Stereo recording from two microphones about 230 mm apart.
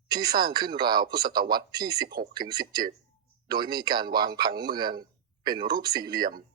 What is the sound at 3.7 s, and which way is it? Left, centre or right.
A man's voice, centre.